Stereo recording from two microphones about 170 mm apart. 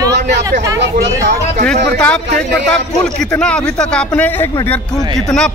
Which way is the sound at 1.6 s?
5° left (ahead or behind).